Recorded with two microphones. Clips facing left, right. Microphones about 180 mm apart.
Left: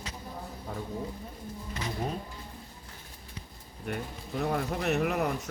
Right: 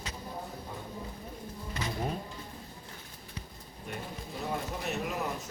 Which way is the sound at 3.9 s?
60° left (ahead or behind).